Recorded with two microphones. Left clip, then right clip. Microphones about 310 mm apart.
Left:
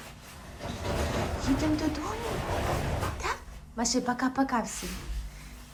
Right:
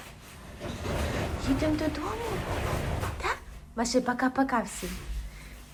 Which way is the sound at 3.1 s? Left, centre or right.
Centre.